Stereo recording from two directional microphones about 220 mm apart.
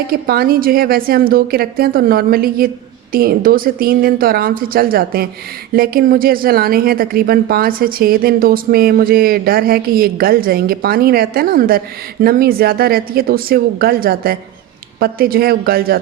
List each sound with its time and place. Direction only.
0.1 s a woman's voice: 45° right (ahead or behind)